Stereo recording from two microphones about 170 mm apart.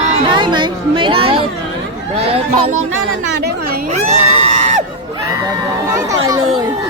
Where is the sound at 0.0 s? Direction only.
40° right (ahead or behind).